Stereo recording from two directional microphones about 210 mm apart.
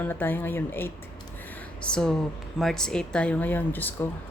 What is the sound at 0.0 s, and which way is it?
A woman's voice, 10° left (ahead or behind).